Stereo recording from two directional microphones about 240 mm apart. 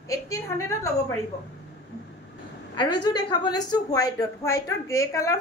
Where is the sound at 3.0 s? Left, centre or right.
Centre.